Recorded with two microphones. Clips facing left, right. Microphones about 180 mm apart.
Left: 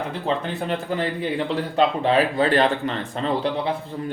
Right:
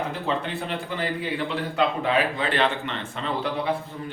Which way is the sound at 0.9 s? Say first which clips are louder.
Left 2 dB; 40° left (ahead or behind).